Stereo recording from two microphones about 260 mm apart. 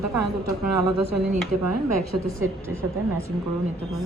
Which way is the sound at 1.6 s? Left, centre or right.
Right.